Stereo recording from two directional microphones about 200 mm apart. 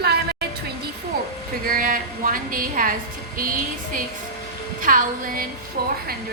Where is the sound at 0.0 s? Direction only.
50° right (ahead or behind).